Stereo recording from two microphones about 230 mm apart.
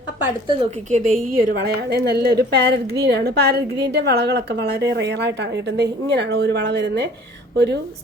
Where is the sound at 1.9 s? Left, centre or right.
Right.